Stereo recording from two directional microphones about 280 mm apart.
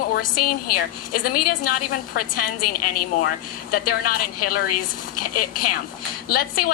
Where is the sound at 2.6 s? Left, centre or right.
Left.